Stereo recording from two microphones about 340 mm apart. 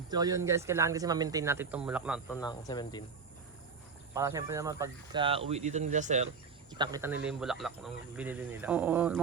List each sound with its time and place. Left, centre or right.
0.1 s speech: centre
2.3 s speech: centre
4.1 s speech: centre